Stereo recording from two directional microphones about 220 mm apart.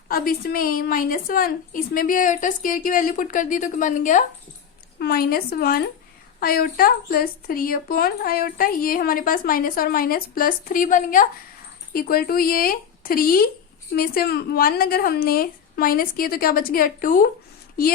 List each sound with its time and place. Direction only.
0.1 s speech: 40° left (ahead or behind)